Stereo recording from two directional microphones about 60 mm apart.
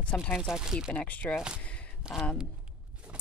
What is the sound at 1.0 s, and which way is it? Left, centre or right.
Speech, left.